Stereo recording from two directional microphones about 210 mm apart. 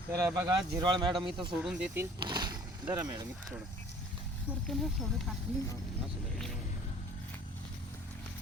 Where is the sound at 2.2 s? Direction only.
20° right (ahead or behind).